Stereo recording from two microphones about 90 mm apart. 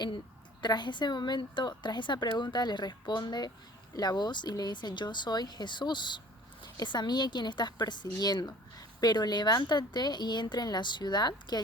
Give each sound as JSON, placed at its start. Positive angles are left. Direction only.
{"t": 0.6, "sound": "a woman's voice", "side_deg": 55}